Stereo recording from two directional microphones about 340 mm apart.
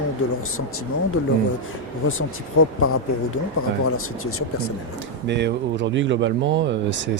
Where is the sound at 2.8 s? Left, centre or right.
Left.